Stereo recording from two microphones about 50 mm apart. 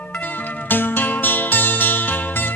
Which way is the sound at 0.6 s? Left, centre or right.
Left.